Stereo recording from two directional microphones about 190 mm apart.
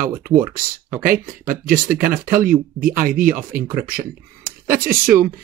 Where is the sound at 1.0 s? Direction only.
45° right (ahead or behind).